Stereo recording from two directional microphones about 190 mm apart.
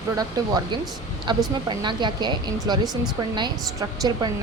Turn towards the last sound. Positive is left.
turn(degrees=-20)  # may be behind; listen again after turning